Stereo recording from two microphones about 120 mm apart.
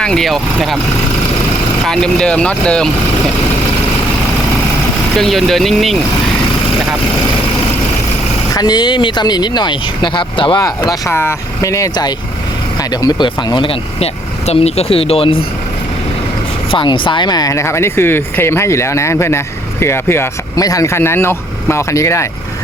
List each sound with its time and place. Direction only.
0.0 s speech: 5° left (ahead or behind)
1.8 s speech: 5° left (ahead or behind)
5.1 s speech: centre (ahead or behind)
8.5 s speech: 35° left (ahead or behind)
10.6 s speech: 30° left (ahead or behind)
11.1 s speech: 20° left (ahead or behind); by 15.4 s 50° left (ahead or behind)
16.7 s speech: 45° left (ahead or behind); by 22.3 s 25° left (ahead or behind)